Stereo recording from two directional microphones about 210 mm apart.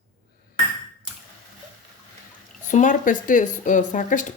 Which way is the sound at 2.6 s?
40° left (ahead or behind).